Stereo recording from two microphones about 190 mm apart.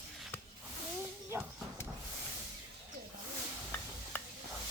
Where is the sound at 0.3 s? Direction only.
10° left (ahead or behind).